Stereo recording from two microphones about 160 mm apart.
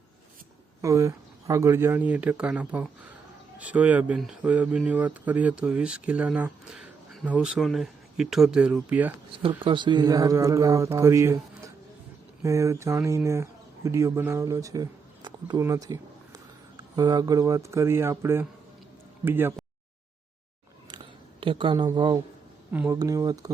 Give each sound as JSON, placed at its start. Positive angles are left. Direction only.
{"t": 0.8, "sound": "speech", "side_deg": -20}
{"t": 9.4, "sound": "speech", "side_deg": -30}
{"t": 15.6, "sound": "a sound", "side_deg": -20}
{"t": 16.9, "sound": "speech", "side_deg": -25}
{"t": 21.4, "sound": "speech", "side_deg": -30}